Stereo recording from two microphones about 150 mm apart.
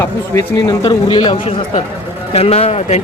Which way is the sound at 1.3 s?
50° left (ahead or behind).